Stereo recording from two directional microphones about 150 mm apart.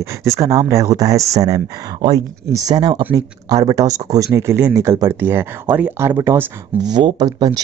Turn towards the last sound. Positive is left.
turn(degrees=-25)  # may be behind; listen again after turning